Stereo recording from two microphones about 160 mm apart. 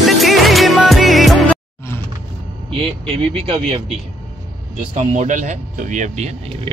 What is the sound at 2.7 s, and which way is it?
Speech, 35° right (ahead or behind).